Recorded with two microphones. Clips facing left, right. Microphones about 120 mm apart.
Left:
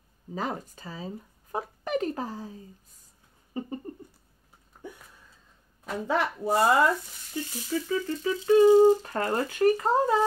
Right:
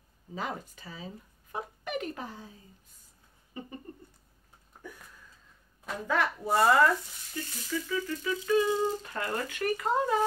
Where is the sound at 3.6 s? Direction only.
35° left (ahead or behind).